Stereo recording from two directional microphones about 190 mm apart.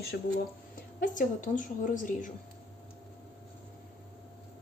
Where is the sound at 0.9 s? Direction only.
45° left (ahead or behind).